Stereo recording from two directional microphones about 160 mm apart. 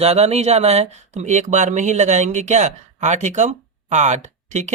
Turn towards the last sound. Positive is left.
turn(degrees=-45)  # may be behind; listen again after turning